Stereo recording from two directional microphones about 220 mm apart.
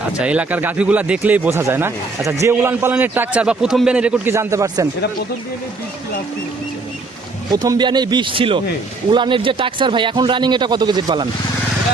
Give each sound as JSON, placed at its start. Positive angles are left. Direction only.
{"t": 0.2, "sound": "a man's voice", "side_deg": -5}
{"t": 7.5, "sound": "speech", "side_deg": -20}